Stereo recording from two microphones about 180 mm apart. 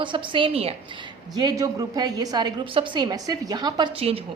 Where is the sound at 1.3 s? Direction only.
20° right (ahead or behind).